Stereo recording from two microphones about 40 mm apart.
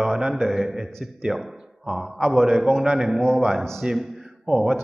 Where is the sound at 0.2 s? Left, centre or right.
Centre.